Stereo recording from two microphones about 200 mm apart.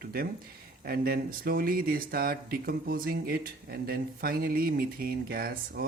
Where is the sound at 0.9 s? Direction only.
50° right (ahead or behind).